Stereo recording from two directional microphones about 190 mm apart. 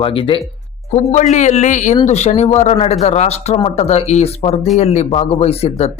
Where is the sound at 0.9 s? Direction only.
40° left (ahead or behind).